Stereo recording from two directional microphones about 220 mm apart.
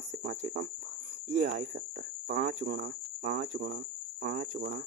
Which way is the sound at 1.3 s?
40° right (ahead or behind).